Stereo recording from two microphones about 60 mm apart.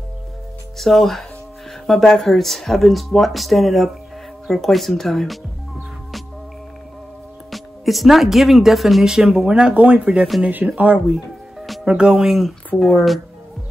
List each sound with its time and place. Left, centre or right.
0.7 s speech: centre
7.5 s speech: centre